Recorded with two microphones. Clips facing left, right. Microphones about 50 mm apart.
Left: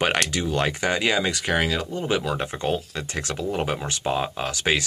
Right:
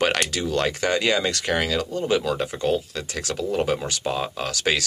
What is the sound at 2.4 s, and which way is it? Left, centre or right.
Speech, left.